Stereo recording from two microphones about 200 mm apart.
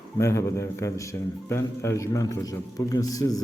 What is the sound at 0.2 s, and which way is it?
A man's voice, 15° left (ahead or behind).